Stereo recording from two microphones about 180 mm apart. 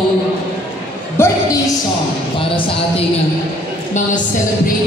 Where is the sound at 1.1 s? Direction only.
15° left (ahead or behind).